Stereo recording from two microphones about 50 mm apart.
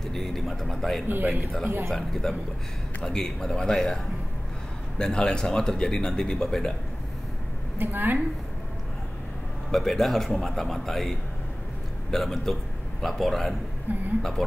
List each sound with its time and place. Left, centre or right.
0.1 s speech: centre
1.0 s a man's voice: right
1.9 s a man's voice: centre
7.7 s a woman's voice: right
9.7 s a man's voice: centre
13.9 s a man's voice: right